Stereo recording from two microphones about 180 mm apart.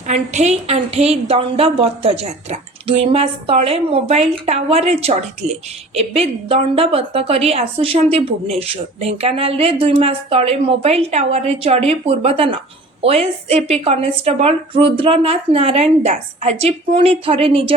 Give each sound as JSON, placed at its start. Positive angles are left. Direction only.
{"t": 0.1, "sound": "a woman's voice", "side_deg": -40}